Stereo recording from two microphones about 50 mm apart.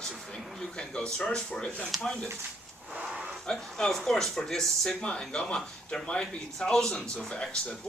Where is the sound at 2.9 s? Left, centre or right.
Right.